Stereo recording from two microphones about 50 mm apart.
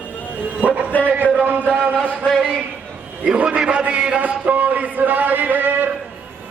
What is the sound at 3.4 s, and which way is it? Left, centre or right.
A man's voice, centre.